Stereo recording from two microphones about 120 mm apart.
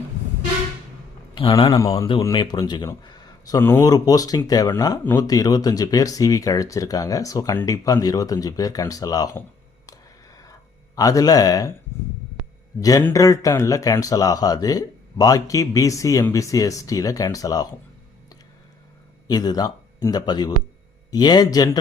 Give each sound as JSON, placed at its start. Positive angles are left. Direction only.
{"t": 1.4, "sound": "a man's voice", "side_deg": 45}
{"t": 1.8, "sound": "speech", "side_deg": 30}
{"t": 3.0, "sound": "a sound", "side_deg": 35}
{"t": 3.6, "sound": "speech", "side_deg": 20}
{"t": 3.8, "sound": "speech", "side_deg": 30}
{"t": 10.3, "sound": "a sound", "side_deg": 30}
{"t": 12.8, "sound": "speech", "side_deg": 30}
{"t": 19.3, "sound": "speech", "side_deg": 35}